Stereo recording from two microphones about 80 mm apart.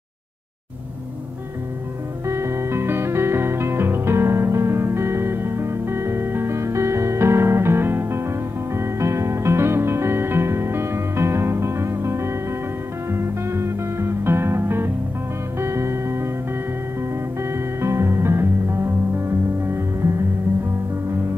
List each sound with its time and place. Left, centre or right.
2.2 s music: right
17.4 s music: right